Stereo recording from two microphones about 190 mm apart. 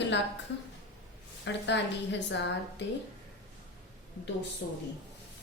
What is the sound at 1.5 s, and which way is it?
Speech, 70° left (ahead or behind).